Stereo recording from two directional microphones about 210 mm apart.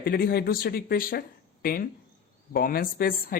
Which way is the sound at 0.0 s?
45° left (ahead or behind).